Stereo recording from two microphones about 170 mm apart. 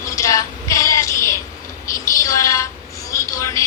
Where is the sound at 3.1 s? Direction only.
15° left (ahead or behind).